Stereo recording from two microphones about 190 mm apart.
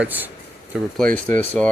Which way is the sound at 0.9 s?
5° left (ahead or behind).